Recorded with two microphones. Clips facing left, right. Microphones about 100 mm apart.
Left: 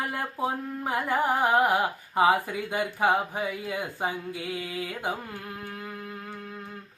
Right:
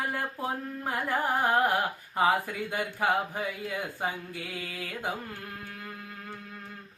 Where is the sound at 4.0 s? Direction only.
10° left (ahead or behind).